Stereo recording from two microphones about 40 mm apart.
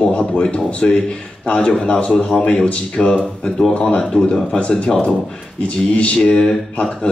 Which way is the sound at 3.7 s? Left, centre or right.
Left.